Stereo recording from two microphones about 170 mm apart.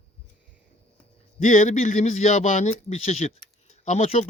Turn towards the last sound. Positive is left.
turn(degrees=40)  # may be behind; listen again after turning